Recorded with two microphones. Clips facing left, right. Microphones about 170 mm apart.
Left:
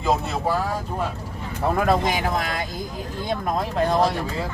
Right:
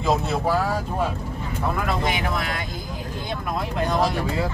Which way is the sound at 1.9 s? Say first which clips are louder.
Left 3 dB; 40° left (ahead or behind).